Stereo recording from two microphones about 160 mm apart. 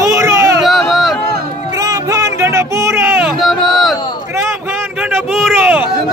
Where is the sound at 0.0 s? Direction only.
20° right (ahead or behind).